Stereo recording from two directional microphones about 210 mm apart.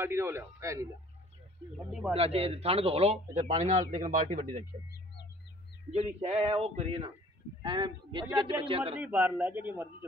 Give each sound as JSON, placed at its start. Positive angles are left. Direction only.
{"t": 0.0, "sound": "speech", "side_deg": -10}
{"t": 1.9, "sound": "speech", "side_deg": -5}
{"t": 2.1, "sound": "a man's voice", "side_deg": -30}
{"t": 5.9, "sound": "a man's voice", "side_deg": -30}
{"t": 8.9, "sound": "speech", "side_deg": -10}